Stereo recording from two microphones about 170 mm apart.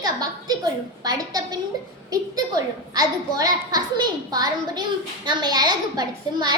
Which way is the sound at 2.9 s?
20° right (ahead or behind).